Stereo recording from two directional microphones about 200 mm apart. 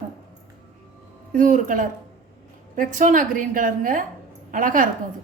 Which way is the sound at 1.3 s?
40° right (ahead or behind).